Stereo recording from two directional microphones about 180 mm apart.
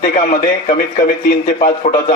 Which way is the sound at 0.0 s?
50° left (ahead or behind).